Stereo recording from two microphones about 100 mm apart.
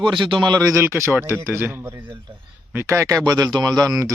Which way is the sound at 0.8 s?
25° right (ahead or behind).